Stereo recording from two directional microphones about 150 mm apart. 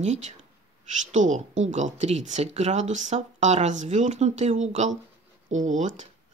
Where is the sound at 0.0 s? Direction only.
50° right (ahead or behind).